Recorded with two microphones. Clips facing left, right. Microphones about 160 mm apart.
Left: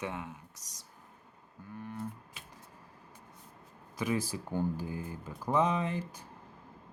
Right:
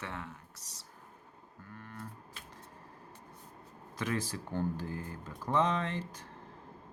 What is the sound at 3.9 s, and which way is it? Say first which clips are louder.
Speech: left 3 dB; 10° left (ahead or behind).